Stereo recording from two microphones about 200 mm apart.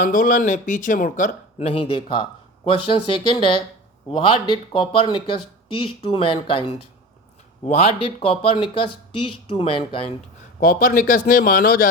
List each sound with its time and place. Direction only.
0.0 s speech: 45° left (ahead or behind); by 10.1 s 25° left (ahead or behind)
10.6 s a man's voice: 45° left (ahead or behind)